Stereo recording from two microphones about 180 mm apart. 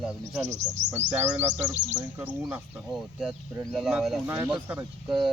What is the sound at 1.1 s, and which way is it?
Speech, 10° right (ahead or behind).